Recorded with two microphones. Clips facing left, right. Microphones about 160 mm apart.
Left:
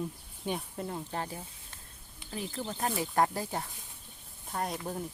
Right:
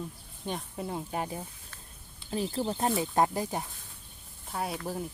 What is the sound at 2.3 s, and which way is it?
Speech, 30° right (ahead or behind).